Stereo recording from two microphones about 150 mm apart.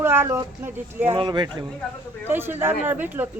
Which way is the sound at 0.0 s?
15° right (ahead or behind).